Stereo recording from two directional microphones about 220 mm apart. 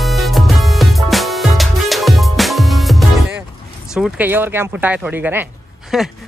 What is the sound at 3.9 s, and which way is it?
Speech, 5° right (ahead or behind).